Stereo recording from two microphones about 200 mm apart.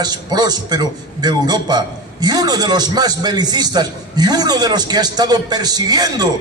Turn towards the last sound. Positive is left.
turn(degrees=-20)  # may be behind; listen again after turning